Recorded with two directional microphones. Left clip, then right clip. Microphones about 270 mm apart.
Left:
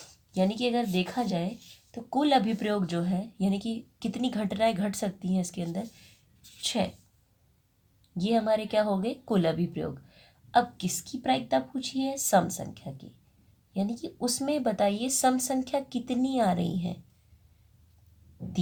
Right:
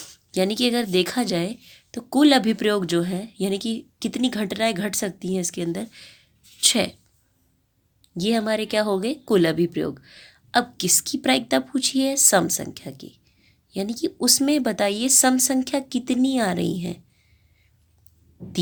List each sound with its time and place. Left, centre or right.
0.0 s speech: right
8.1 s speech: right